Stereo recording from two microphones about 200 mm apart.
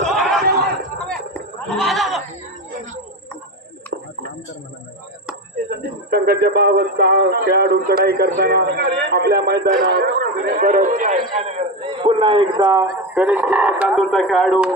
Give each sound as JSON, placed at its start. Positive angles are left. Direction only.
{"t": 0.0, "sound": "battle cry", "side_deg": 0}
{"t": 0.9, "sound": "livestock", "side_deg": 5}
{"t": 5.7, "sound": "a man's voice", "side_deg": -50}
{"t": 13.1, "sound": "speech", "side_deg": -10}